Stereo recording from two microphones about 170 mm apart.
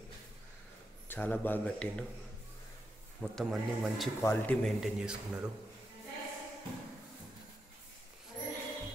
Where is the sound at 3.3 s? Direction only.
Centre (ahead or behind).